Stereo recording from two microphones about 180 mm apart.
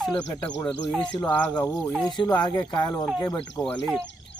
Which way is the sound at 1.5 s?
20° left (ahead or behind).